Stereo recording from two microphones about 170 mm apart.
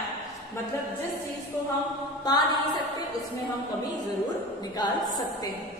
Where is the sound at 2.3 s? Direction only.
25° left (ahead or behind).